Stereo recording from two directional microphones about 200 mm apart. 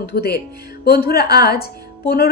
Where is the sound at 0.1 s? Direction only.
50° left (ahead or behind).